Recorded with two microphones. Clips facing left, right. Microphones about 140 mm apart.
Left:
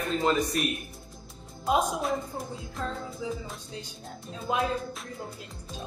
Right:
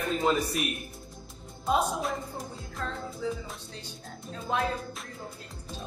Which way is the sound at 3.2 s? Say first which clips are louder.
Right 2 dB; 10° left (ahead or behind).